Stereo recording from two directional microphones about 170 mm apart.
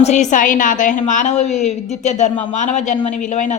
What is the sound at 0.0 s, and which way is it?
A man's voice, 45° left (ahead or behind).